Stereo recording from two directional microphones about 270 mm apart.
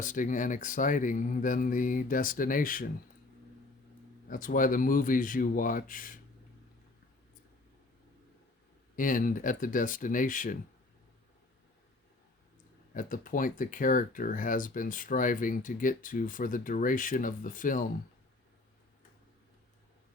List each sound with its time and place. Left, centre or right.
0.0 s speech: left
4.3 s speech: left
9.0 s speech: left
12.9 s speech: left